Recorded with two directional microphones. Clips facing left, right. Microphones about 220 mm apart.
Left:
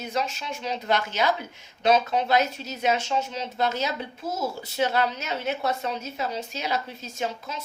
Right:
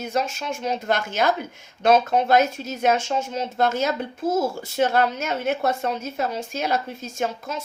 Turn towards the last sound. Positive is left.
turn(degrees=-50)  # may be behind; listen again after turning